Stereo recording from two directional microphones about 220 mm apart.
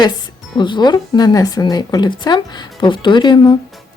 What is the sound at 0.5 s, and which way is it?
Speech, 20° left (ahead or behind).